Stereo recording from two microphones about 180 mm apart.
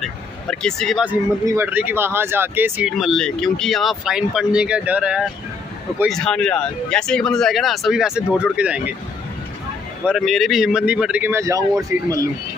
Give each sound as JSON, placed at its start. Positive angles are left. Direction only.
{"t": 0.0, "sound": "speech", "side_deg": 5}
{"t": 1.4, "sound": "speech", "side_deg": -15}
{"t": 3.0, "sound": "speech", "side_deg": 0}
{"t": 6.0, "sound": "speech", "side_deg": 5}
{"t": 10.0, "sound": "speech", "side_deg": 0}